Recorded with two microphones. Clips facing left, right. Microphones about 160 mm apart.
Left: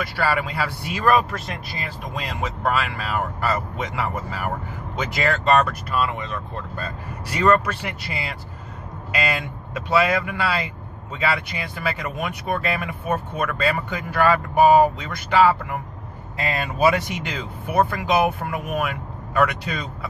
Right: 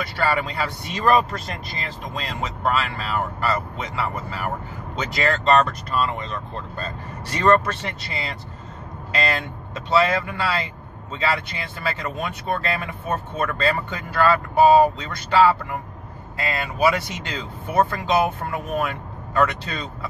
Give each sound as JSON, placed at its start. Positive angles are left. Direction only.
{"t": 0.4, "sound": "speech", "side_deg": 10}